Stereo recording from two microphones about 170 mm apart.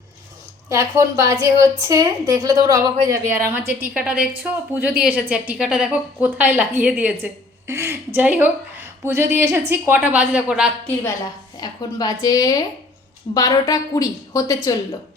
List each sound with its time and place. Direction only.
0.7 s a woman's voice: 15° right (ahead or behind)
11.6 s a woman's voice: 25° left (ahead or behind)